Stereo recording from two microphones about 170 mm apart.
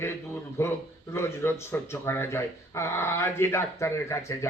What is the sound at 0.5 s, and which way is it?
Speech, 15° left (ahead or behind).